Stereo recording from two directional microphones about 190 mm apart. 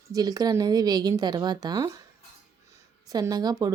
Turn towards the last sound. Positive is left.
turn(degrees=-20)  # may be behind; listen again after turning